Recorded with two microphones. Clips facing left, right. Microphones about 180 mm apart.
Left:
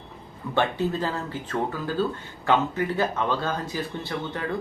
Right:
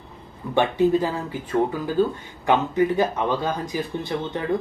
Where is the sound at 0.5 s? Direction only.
15° right (ahead or behind).